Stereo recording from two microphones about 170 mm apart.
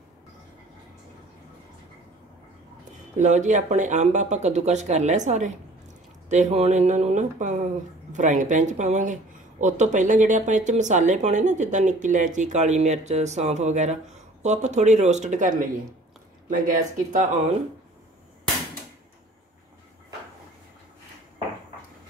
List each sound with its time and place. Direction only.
3.2 s speech: 45° right (ahead or behind)